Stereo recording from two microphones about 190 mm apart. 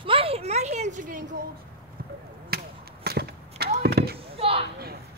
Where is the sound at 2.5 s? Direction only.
55° right (ahead or behind).